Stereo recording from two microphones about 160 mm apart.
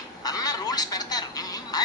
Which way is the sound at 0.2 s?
25° left (ahead or behind).